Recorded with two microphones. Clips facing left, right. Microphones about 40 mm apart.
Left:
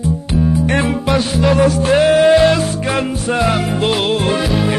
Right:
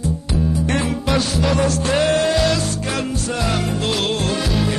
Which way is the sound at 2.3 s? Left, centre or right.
Left.